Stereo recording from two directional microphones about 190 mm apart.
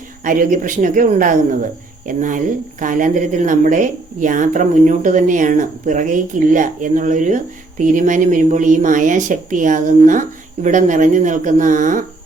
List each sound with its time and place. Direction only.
0.3 s a woman's voice: 45° right (ahead or behind)